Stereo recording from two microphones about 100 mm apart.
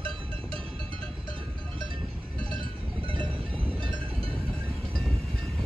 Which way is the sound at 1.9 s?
60° right (ahead or behind).